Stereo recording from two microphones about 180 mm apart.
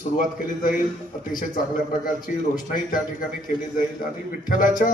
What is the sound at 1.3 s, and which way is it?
Speech, 50° left (ahead or behind).